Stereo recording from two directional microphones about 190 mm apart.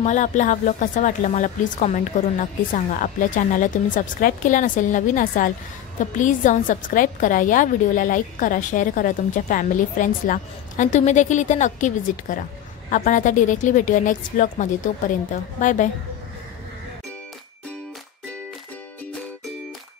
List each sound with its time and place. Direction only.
0.0 s a woman's voice: 40° left (ahead or behind)